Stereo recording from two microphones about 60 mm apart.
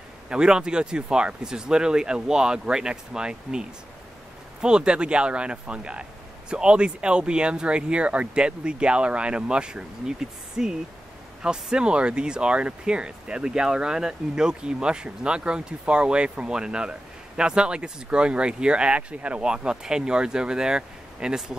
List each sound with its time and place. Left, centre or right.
0.3 s speech: centre